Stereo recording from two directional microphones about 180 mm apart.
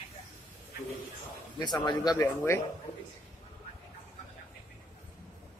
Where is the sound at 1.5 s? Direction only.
25° left (ahead or behind).